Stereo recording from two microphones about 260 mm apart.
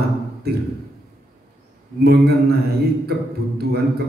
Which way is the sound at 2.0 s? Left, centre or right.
Right.